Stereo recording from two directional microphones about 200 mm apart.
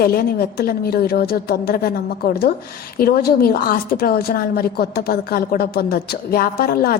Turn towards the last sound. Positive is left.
turn(degrees=50)  # may be behind; listen again after turning